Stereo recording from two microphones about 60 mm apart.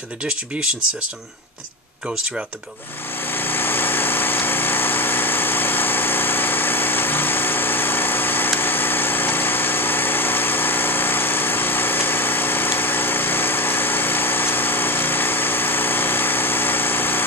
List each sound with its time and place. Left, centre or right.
3.3 s light engine: left